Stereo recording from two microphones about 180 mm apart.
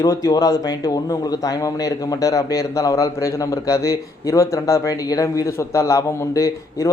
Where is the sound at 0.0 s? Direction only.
20° left (ahead or behind).